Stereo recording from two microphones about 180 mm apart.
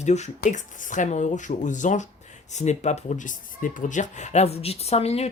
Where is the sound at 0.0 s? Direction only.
40° left (ahead or behind).